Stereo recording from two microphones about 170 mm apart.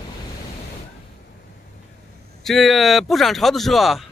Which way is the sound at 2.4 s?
Centre (ahead or behind).